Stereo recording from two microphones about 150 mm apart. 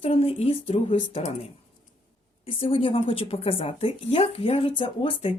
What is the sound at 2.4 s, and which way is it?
A woman's voice, 35° left (ahead or behind).